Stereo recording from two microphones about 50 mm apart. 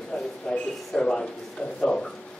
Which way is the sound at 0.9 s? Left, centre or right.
Centre.